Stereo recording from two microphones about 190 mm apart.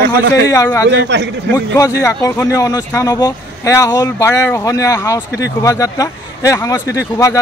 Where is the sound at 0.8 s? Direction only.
65° right (ahead or behind).